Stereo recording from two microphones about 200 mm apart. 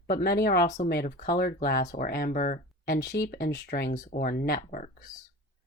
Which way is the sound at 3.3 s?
55° left (ahead or behind).